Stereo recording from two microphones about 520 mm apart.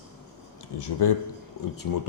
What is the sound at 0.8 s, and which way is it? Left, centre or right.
Speech, left.